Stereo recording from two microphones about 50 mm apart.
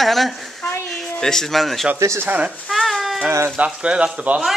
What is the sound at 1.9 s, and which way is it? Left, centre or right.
Speech, right.